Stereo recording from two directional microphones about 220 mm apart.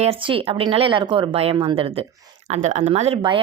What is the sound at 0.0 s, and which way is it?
Speech, 25° right (ahead or behind).